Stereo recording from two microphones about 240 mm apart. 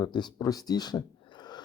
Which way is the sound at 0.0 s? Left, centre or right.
Centre.